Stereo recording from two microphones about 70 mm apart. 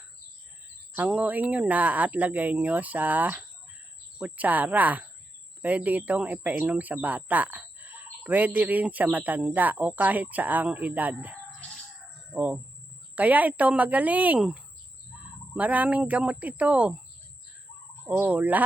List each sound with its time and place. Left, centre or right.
0.9 s speech: right
15.5 s speech: right
18.1 s speech: right